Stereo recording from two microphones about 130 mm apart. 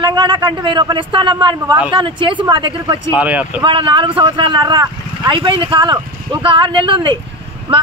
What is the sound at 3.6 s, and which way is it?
Speech, 40° right (ahead or behind).